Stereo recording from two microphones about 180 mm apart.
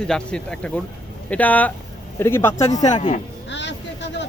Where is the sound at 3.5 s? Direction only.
80° left.